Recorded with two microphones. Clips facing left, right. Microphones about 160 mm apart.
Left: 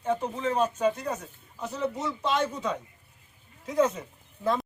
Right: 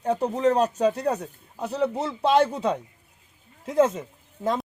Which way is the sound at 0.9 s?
65° right (ahead or behind).